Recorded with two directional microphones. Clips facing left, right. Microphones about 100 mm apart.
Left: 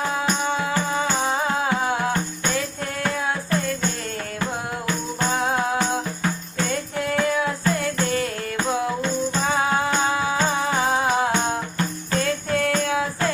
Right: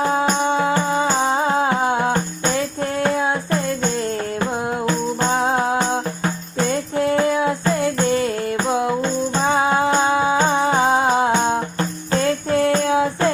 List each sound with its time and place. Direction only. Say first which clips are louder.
0.0 s music: right 5 dB; 35° right (ahead or behind)
5.2 s music: right 3 dB; 30° right (ahead or behind)